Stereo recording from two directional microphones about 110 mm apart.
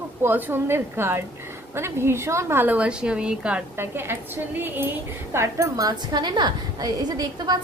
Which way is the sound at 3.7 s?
20° right (ahead or behind).